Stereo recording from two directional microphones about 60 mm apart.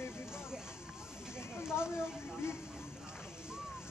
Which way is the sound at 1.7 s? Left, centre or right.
Left.